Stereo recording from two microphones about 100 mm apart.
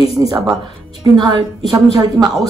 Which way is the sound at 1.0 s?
50° right (ahead or behind).